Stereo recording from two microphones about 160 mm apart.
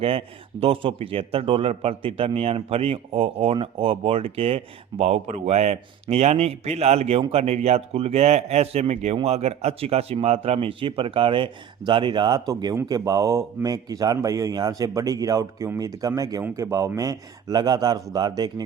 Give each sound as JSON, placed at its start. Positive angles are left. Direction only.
{"t": 0.0, "sound": "a man's voice", "side_deg": -35}